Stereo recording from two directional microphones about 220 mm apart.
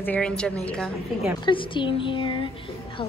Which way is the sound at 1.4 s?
20° left (ahead or behind).